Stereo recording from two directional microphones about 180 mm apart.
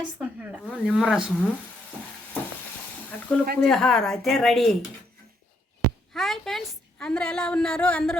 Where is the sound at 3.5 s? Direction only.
5° left (ahead or behind).